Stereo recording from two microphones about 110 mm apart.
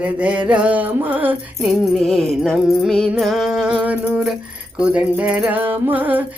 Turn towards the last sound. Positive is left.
turn(degrees=-15)  # may be behind; listen again after turning